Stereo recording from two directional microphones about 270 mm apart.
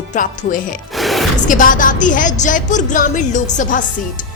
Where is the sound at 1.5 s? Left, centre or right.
Left.